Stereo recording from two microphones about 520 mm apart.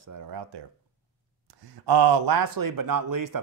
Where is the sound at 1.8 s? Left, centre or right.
Right.